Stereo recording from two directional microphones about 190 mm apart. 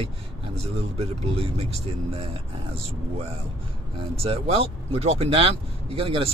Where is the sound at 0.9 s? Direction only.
30° right (ahead or behind).